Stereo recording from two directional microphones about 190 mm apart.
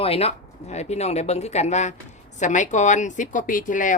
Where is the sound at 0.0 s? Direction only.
30° left (ahead or behind).